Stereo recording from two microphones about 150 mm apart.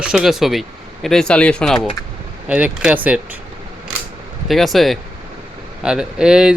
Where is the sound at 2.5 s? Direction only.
10° right (ahead or behind).